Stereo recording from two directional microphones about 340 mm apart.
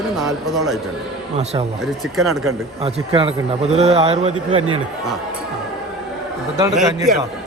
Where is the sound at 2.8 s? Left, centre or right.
Centre.